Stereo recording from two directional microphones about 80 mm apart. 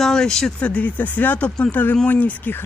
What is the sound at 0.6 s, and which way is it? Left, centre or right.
Speech, centre.